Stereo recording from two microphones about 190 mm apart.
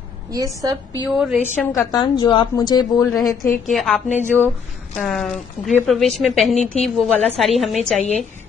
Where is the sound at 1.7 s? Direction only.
20° left (ahead or behind).